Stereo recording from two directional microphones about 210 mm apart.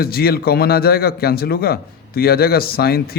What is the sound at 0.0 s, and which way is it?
A man's voice, 45° left (ahead or behind).